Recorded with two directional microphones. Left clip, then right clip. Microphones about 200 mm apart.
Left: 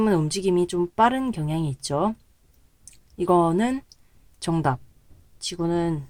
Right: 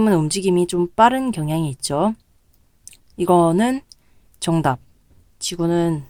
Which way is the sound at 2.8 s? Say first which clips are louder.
Right 5 dB; 30° right (ahead or behind).